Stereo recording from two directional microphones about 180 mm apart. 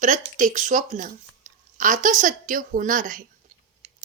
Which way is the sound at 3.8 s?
45° right (ahead or behind).